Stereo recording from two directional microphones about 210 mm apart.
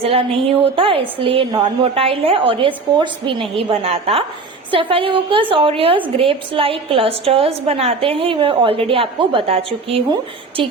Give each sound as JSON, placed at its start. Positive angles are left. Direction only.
{"t": 0.0, "sound": "a woman's voice", "side_deg": -25}